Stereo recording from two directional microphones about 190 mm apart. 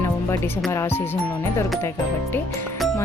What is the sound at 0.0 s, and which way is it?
Music, 10° left (ahead or behind).